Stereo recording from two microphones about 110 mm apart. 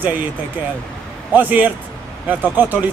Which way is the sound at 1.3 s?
15° right (ahead or behind).